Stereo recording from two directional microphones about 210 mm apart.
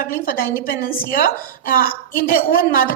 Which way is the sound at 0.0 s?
40° left (ahead or behind).